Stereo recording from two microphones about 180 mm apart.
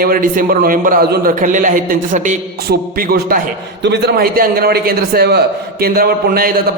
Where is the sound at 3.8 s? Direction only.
65° right (ahead or behind).